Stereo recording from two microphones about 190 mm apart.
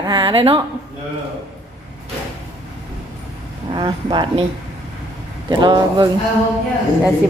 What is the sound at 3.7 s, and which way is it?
Speech, 25° right (ahead or behind).